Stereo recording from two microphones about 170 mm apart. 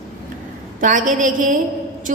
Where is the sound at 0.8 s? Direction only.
50° right (ahead or behind).